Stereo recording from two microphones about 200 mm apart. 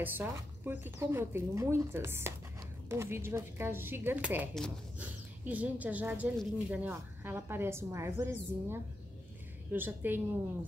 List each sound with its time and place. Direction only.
0.0 s a woman's voice: 10° right (ahead or behind)